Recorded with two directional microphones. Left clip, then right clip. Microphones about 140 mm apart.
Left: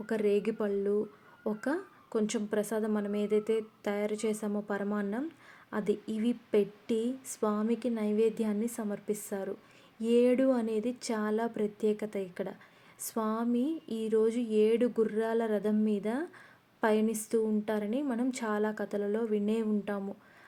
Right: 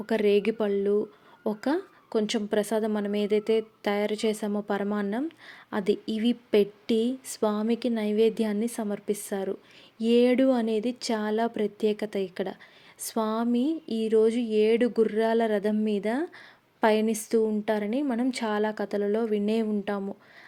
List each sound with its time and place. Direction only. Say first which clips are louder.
0.0 s a woman's voice: right 6 dB; 25° right (ahead or behind)